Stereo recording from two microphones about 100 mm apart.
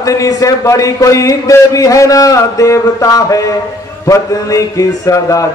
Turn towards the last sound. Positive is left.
turn(degrees=35)  # may be behind; listen again after turning